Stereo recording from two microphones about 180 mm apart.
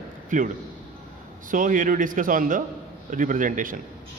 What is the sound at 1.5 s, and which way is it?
A man's voice, 45° right (ahead or behind).